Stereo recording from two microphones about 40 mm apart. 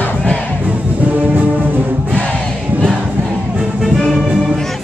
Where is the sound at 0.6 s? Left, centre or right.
Right.